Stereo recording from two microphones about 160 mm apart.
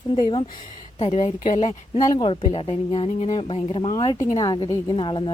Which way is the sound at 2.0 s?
30° left (ahead or behind).